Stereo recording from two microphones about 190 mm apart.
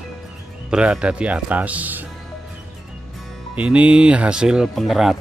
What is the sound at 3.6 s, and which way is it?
Speech, 5° right (ahead or behind).